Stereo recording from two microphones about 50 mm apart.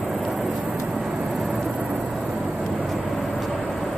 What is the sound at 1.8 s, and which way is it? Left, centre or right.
Vehicle, right.